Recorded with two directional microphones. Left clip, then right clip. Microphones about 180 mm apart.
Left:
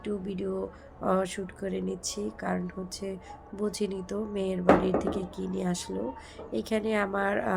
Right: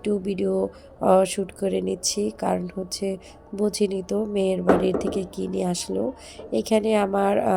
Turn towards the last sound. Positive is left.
turn(degrees=-25)  # may be behind; listen again after turning